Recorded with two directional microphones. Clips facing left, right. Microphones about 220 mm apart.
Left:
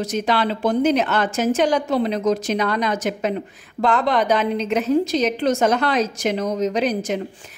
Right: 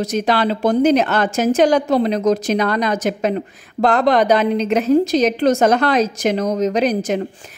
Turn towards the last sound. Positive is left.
turn(degrees=-45)  # may be behind; listen again after turning